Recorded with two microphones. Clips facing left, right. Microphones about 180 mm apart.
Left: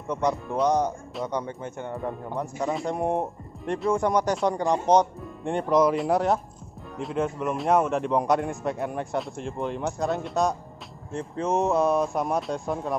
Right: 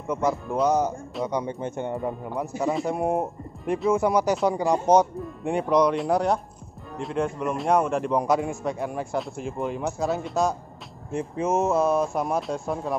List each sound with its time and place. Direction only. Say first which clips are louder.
0.1 s speech: right 1 dB; 5° right (ahead or behind)
1.4 s speech: right 4 dB; 20° right (ahead or behind)
2.0 s speech: right 1 dB; 5° right (ahead or behind)
11.1 s speech: right 2 dB; 10° right (ahead or behind)